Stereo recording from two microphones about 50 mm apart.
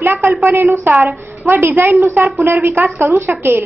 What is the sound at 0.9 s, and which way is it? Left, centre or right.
A woman's voice, right.